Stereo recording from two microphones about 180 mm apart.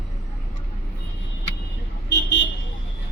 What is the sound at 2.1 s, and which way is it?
Vehicle, 80° left.